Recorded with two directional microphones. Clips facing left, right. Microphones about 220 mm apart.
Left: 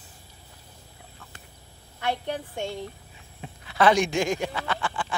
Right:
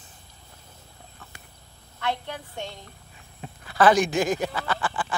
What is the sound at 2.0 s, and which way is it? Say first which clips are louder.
Speech: left 2 dB; 10° left (ahead or behind).